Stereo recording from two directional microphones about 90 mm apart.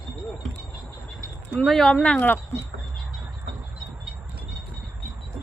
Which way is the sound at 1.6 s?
10° left (ahead or behind).